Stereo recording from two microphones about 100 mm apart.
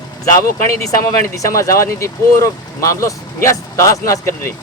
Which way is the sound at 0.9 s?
35° left (ahead or behind).